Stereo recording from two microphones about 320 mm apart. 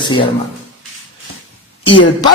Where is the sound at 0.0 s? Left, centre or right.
Centre.